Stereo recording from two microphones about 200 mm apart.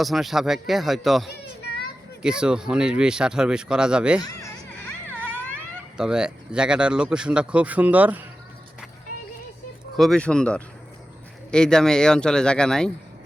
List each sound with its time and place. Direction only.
0.0 s speech: centre (ahead or behind)
1.3 s children playing: 55° left (ahead or behind)
2.2 s speech: 5° right (ahead or behind)
4.2 s a sound: 15° left (ahead or behind)
6.0 s speech: 5° right (ahead or behind)
10.0 s speech: 5° left (ahead or behind)